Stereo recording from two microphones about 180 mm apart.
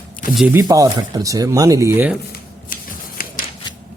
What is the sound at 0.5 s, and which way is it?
Speech, 20° right (ahead or behind).